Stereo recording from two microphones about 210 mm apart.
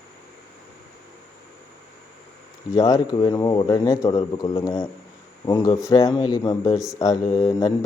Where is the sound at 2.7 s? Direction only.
15° left (ahead or behind).